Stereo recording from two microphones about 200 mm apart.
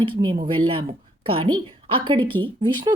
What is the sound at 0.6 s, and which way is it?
Speech, 25° right (ahead or behind).